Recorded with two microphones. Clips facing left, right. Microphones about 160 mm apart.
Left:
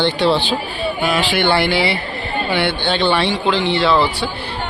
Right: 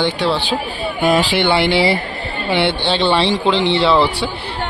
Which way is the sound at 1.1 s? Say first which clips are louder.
Even; 25° right (ahead or behind).